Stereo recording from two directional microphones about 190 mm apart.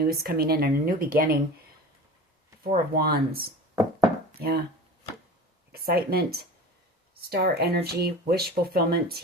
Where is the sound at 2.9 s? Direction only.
55° right (ahead or behind).